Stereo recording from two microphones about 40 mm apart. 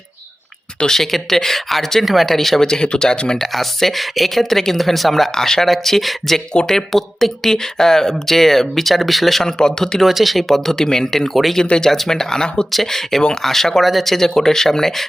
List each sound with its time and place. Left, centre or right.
0.9 s speech: centre
2.6 s speech: centre
3.4 s speech: centre
10.0 s speech: centre